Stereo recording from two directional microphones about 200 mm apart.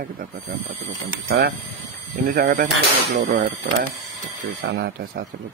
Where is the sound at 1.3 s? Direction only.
55° right (ahead or behind).